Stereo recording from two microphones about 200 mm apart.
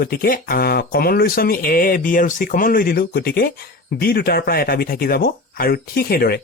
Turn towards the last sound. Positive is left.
turn(degrees=50)  # may be behind; listen again after turning